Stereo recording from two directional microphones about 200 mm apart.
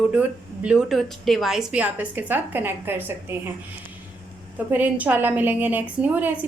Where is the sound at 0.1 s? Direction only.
5° right (ahead or behind).